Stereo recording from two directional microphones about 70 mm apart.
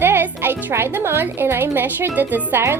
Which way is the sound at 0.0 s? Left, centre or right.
Right.